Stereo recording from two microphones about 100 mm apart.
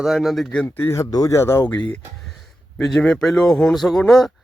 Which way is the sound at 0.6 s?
25° left (ahead or behind).